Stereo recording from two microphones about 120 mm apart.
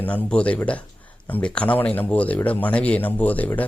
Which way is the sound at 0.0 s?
10° left (ahead or behind).